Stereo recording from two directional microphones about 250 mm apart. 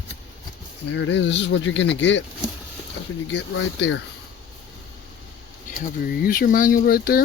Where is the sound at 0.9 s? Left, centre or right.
Left.